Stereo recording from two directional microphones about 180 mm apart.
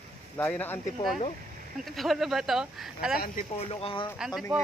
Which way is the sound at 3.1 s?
50° left (ahead or behind).